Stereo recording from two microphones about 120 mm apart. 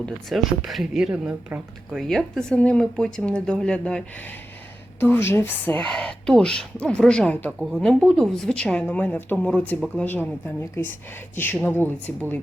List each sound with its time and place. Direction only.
0.0 s speech: centre (ahead or behind)
2.0 s a woman's voice: centre (ahead or behind)